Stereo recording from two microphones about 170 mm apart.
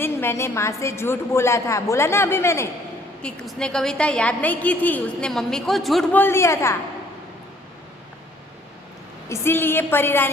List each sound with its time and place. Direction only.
0.0 s a woman's voice: 15° left (ahead or behind)
3.2 s a woman's voice: 5° left (ahead or behind)
6.1 s a woman's voice: 15° left (ahead or behind)
9.3 s a woman's voice: 15° left (ahead or behind)